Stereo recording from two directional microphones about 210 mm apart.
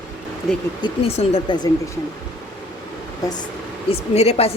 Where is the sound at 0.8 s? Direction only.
25° left (ahead or behind).